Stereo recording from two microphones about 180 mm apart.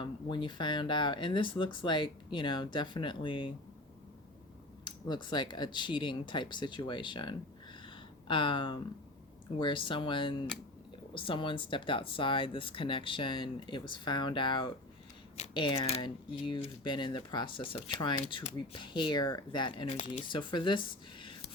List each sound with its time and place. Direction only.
0.0 s speech: 25° left (ahead or behind)
4.9 s speech: 25° left (ahead or behind)